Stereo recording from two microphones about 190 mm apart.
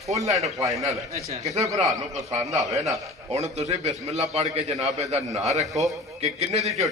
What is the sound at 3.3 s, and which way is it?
A man's voice, 35° right (ahead or behind).